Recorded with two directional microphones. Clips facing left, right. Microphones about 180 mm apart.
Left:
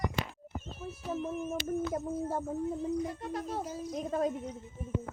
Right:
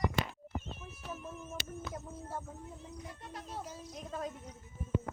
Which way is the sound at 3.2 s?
50° left (ahead or behind).